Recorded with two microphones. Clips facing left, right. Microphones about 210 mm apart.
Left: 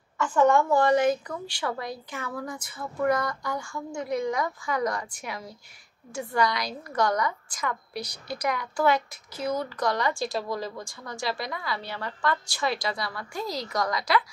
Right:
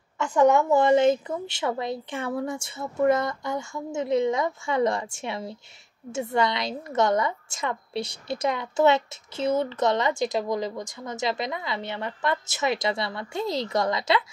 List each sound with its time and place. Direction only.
0.2 s a woman's voice: 15° right (ahead or behind)